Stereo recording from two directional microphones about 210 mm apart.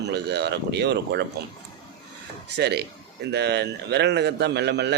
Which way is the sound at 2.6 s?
50° right (ahead or behind).